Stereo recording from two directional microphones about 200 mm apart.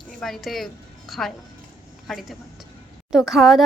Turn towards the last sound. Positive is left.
turn(degrees=0)  # may be behind; listen again after turning